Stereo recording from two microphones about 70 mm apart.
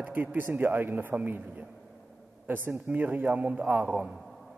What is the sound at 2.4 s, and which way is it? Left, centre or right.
A man's voice, right.